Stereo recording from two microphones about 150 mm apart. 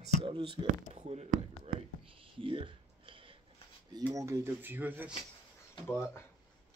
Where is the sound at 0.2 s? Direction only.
35° right (ahead or behind).